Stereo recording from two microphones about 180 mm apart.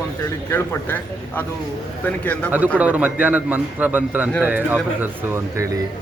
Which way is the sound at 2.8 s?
10° right (ahead or behind).